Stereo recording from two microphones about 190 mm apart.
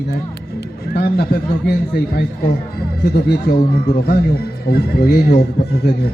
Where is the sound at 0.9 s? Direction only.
55° left (ahead or behind).